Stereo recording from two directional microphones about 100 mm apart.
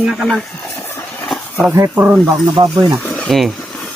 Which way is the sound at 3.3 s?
Centre (ahead or behind).